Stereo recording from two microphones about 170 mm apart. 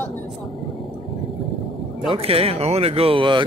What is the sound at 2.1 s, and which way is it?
Speech, 35° right (ahead or behind).